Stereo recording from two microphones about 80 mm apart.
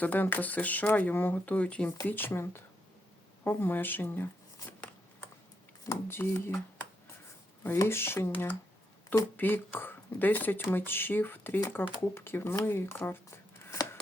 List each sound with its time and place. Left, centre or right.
0.0 s speech: left
5.8 s speech: left
7.6 s speech: left